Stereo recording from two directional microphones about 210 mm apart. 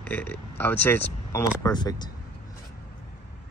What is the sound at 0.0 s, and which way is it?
Speech, 5° left (ahead or behind).